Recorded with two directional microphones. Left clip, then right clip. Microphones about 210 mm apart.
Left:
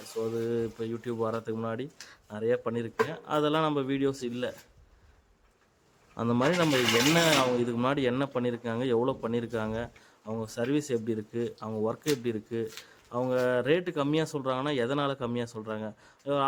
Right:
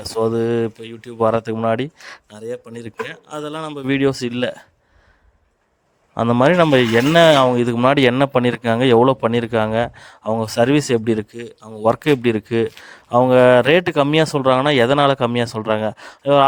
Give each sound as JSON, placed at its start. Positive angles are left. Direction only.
{"t": 0.1, "sound": "speech", "side_deg": -45}
{"t": 2.3, "sound": "speech", "side_deg": 0}
{"t": 3.8, "sound": "speech", "side_deg": -45}
{"t": 6.1, "sound": "speech", "side_deg": -45}